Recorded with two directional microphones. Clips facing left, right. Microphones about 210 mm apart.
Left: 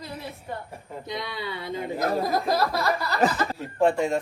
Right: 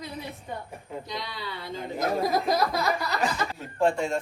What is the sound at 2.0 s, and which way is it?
Speech, centre (ahead or behind).